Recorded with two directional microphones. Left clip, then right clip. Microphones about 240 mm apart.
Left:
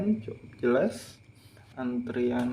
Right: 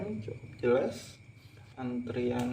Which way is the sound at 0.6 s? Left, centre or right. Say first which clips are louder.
Left 2 dB; left.